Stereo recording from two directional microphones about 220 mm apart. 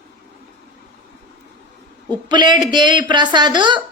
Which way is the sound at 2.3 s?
20° right (ahead or behind).